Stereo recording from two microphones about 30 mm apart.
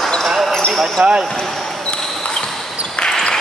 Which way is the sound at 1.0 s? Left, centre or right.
Right.